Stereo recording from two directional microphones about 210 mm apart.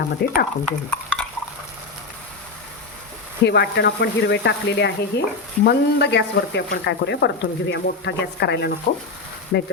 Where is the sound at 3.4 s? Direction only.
55° left (ahead or behind).